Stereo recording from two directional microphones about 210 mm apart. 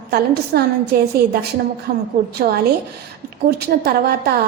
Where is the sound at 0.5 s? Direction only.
50° right (ahead or behind).